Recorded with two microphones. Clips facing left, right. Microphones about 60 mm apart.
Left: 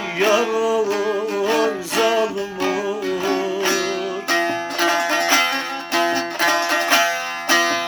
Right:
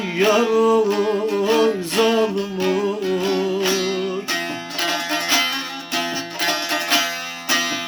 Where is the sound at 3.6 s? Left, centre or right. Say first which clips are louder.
Even; left.